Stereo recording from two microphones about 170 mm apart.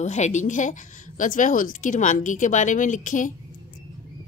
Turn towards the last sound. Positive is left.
turn(degrees=50)  # may be behind; listen again after turning